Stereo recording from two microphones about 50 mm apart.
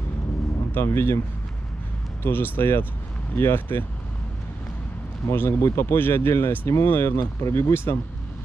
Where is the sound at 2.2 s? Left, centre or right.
Left.